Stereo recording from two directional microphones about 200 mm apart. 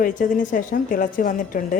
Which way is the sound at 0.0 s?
40° left (ahead or behind).